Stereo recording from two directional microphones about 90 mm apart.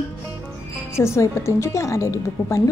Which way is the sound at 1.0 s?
30° left (ahead or behind).